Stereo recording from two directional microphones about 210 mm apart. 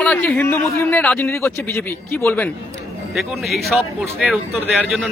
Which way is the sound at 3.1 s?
Centre (ahead or behind).